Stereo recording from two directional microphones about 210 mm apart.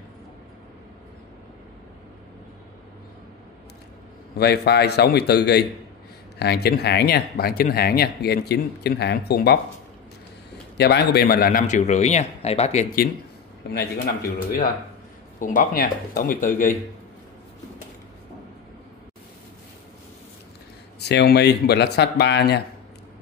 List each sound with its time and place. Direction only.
4.4 s speech: 50° left (ahead or behind)
10.8 s a man's voice: 50° left (ahead or behind); by 12.8 s 30° left (ahead or behind)
13.7 s a man's voice: 45° left (ahead or behind)
21.0 s speech: 50° left (ahead or behind)